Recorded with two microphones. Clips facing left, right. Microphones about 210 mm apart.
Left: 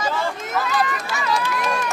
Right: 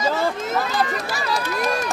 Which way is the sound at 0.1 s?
30° right (ahead or behind).